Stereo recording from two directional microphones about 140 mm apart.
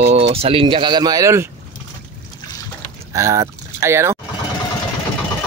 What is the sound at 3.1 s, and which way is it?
Speech, 20° right (ahead or behind).